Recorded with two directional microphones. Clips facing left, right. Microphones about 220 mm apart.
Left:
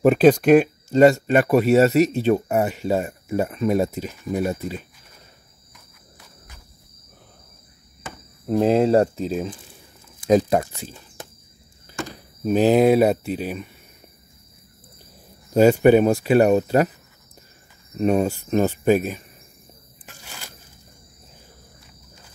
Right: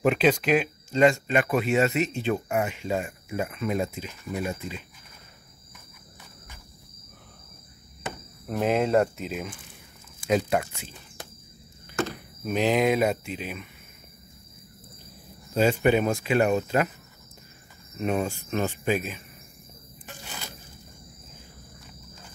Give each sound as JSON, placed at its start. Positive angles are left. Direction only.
{"t": 0.0, "sound": "speech", "side_deg": 45}
{"t": 8.5, "sound": "speech", "side_deg": 30}
{"t": 12.4, "sound": "speech", "side_deg": 35}
{"t": 15.5, "sound": "speech", "side_deg": 40}
{"t": 17.9, "sound": "speech", "side_deg": 40}